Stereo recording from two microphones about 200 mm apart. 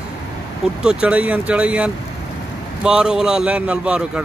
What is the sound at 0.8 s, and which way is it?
Speech, 5° right (ahead or behind).